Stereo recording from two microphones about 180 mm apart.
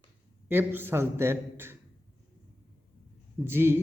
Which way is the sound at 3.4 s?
15° right (ahead or behind).